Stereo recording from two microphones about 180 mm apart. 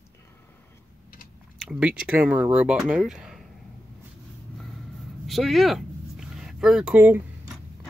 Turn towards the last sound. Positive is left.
turn(degrees=-10)  # may be behind; listen again after turning